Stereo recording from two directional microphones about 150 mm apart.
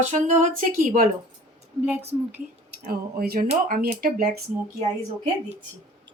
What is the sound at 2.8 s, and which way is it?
Speech, 85° right.